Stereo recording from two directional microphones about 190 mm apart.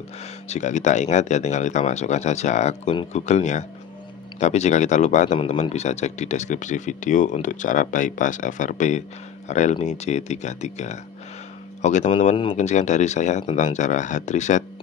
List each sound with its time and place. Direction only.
0.5 s speech: 40° left (ahead or behind)